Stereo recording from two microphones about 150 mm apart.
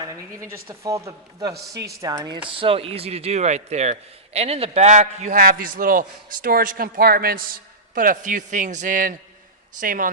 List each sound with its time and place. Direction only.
0.0 s a sound: 20° right (ahead or behind)
0.5 s speech: 20° right (ahead or behind)
2.5 s speech: 35° right (ahead or behind); by 5.4 s 50° right (ahead or behind)
5.4 s a man's voice: 75° right (ahead or behind)